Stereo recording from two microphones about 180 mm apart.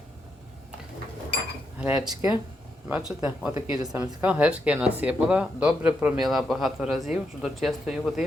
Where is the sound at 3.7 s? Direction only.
20° right (ahead or behind).